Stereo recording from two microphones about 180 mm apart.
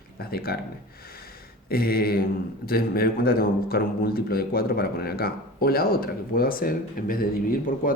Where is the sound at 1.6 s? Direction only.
55° left (ahead or behind).